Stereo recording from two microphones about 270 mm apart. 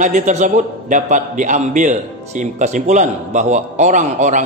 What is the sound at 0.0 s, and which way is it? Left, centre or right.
A man's voice, right.